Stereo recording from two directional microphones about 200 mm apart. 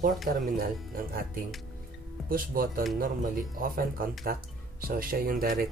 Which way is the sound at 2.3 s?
45° right (ahead or behind).